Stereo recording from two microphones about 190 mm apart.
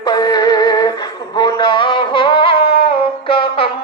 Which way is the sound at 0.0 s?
20° left (ahead or behind).